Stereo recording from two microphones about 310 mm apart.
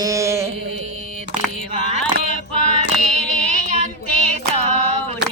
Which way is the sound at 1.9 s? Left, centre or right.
Right.